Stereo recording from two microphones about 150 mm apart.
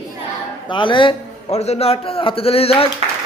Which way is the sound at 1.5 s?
45° left (ahead or behind).